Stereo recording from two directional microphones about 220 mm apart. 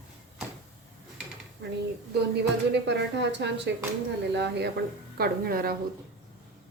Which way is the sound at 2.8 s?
50° right (ahead or behind).